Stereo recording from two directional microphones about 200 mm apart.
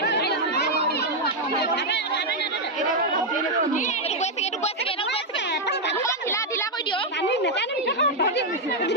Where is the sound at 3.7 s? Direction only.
35° left (ahead or behind).